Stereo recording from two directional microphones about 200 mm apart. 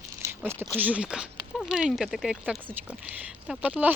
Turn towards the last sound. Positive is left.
turn(degrees=-5)  # may be behind; listen again after turning